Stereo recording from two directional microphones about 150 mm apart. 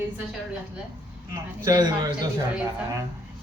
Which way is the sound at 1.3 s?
25° right (ahead or behind).